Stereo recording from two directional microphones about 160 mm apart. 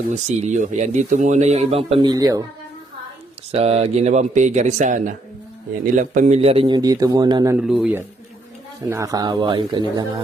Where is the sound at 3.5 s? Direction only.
40° right (ahead or behind); by 7.6 s 25° right (ahead or behind).